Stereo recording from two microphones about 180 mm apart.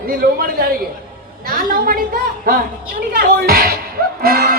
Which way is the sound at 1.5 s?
50° right (ahead or behind).